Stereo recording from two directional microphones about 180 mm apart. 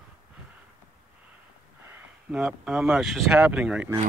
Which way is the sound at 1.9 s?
10° right (ahead or behind).